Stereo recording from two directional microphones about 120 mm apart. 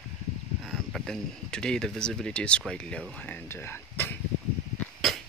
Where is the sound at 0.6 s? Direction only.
Centre (ahead or behind); by 4.2 s 20° left (ahead or behind).